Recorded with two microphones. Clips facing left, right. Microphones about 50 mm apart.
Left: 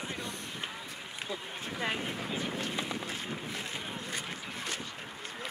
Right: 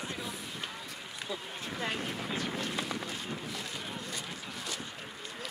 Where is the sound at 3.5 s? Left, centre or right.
Left.